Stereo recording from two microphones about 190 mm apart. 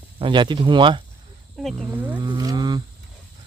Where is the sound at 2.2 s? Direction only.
20° right (ahead or behind).